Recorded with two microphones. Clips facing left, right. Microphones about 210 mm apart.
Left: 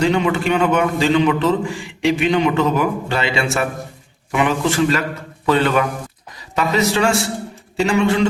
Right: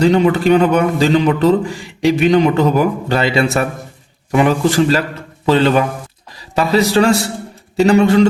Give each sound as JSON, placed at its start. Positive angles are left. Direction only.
{"t": 0.0, "sound": "a man's voice", "side_deg": -35}